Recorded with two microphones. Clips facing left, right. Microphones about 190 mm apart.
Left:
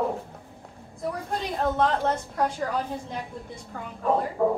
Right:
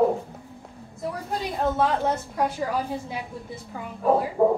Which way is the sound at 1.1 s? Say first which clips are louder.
Even; 5° right (ahead or behind).